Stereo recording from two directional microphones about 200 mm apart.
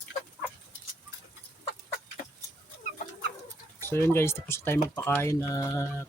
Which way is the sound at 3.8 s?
10° left (ahead or behind).